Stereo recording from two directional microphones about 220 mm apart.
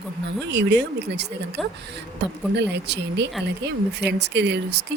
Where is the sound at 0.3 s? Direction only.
50° right (ahead or behind).